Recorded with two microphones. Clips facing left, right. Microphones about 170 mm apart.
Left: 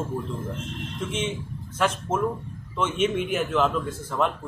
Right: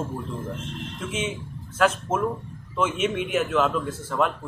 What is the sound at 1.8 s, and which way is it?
A man's voice, 5° right (ahead or behind).